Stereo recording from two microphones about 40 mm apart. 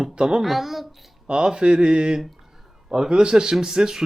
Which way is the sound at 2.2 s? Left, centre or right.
Centre.